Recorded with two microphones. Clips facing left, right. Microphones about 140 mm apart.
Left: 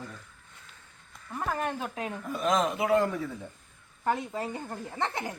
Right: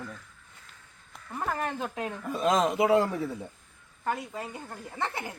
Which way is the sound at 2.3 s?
35° right (ahead or behind).